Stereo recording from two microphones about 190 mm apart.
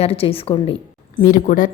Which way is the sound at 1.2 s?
45° left (ahead or behind).